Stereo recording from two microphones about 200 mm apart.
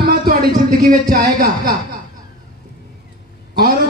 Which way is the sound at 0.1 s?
50° right (ahead or behind).